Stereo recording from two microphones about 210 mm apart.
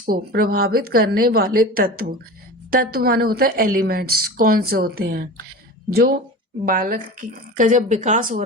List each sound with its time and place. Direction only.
0.0 s a woman's voice: 45° right (ahead or behind)